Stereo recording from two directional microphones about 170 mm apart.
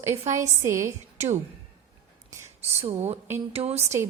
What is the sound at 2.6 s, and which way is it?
Speech, 40° right (ahead or behind).